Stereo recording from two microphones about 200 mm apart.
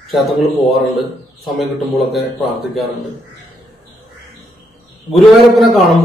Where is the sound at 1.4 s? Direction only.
Centre (ahead or behind).